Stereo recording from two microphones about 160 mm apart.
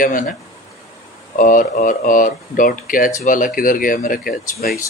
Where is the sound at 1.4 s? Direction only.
55° left (ahead or behind).